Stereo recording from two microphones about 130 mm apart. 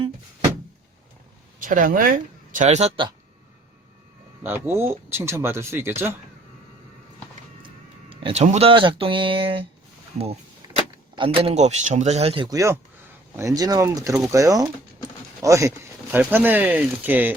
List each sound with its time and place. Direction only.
1.5 s speech: 90° right; by 2.9 s 60° right (ahead or behind)
4.4 s speech: 15° right (ahead or behind)
8.1 s speech: 50° right (ahead or behind)
8.7 s a sound: 40° right (ahead or behind)
11.1 s speech: 40° right (ahead or behind)
11.5 s speech: 60° right (ahead or behind)
12.5 s speech: 25° right (ahead or behind)